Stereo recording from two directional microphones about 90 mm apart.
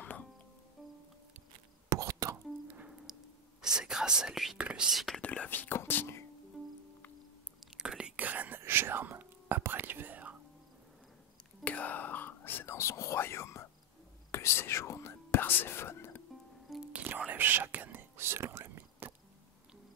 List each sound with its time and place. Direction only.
1.9 s whispering: 35° right (ahead or behind)
3.1 s sigh: 5° right (ahead or behind)
3.6 s speech: 5° right (ahead or behind)
5.2 s speech: 15° left (ahead or behind)
7.6 s whispering: 5° right (ahead or behind)
11.6 s whispering: 15° left (ahead or behind)
16.9 s whispering: 20° right (ahead or behind)